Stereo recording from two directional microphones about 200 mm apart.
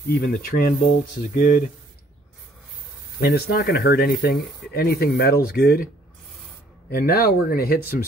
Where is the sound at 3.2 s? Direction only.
50° left (ahead or behind).